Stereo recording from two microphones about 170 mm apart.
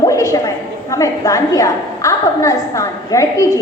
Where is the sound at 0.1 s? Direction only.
20° left (ahead or behind).